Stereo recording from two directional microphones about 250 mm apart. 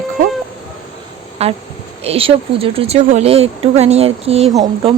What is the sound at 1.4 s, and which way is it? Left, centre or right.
Speech, right.